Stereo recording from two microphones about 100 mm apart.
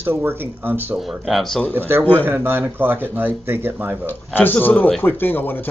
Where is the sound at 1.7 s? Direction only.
20° right (ahead or behind).